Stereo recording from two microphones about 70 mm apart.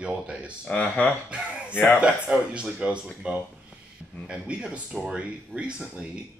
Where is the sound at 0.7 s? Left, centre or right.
Centre.